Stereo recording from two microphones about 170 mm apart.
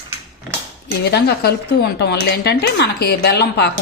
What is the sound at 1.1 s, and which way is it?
Speech, 70° left (ahead or behind).